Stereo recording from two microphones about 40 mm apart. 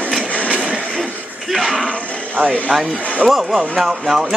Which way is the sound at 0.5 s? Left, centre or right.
Right.